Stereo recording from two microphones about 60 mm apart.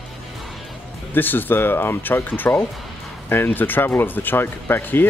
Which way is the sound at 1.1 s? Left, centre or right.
Left.